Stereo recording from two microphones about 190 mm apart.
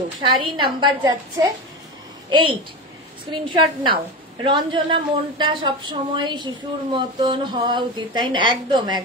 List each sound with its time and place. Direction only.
0.4 s a woman's voice: 25° right (ahead or behind)